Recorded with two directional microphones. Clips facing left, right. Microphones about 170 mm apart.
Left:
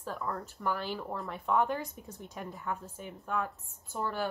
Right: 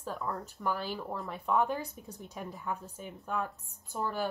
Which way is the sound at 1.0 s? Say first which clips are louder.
Even; centre (ahead or behind).